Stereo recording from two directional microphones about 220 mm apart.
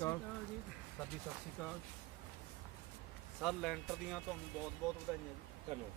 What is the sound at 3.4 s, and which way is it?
Speech, centre (ahead or behind).